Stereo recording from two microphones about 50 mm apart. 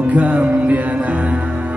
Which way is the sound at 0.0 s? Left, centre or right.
Right.